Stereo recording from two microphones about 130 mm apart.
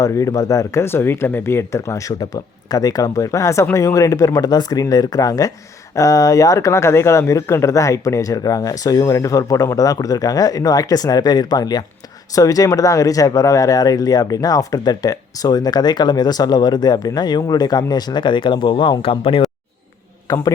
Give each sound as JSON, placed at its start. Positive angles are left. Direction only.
{"t": 0.0, "sound": "speech", "side_deg": 25}
{"t": 20.2, "sound": "a man's voice", "side_deg": 30}